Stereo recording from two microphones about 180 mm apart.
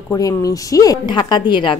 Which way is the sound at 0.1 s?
20° left (ahead or behind).